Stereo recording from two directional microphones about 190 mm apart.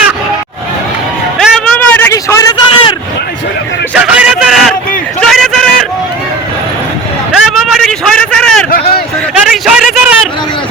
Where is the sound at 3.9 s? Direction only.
5° right (ahead or behind).